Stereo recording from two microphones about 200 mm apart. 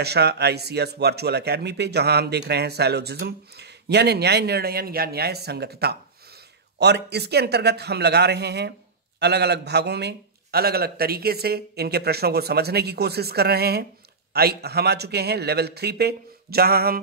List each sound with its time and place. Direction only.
0.0 s a man's voice: 55° right (ahead or behind)